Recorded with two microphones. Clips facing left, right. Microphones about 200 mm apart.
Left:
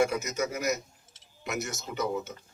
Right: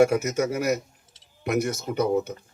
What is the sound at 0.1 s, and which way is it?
Speech, 55° right (ahead or behind).